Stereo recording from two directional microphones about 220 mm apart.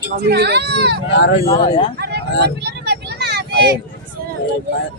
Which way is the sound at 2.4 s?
50° right (ahead or behind).